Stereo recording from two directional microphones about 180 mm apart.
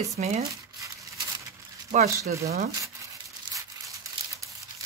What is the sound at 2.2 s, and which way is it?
Speech, 15° right (ahead or behind).